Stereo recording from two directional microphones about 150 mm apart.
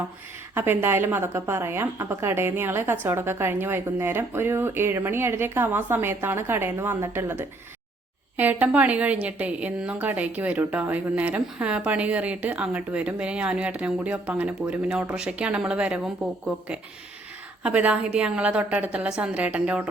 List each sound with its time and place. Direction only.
0.5 s a woman's voice: 15° right (ahead or behind)
17.6 s a woman's voice: 10° right (ahead or behind)